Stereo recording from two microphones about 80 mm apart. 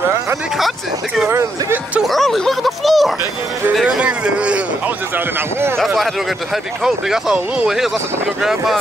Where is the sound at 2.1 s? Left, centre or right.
Centre.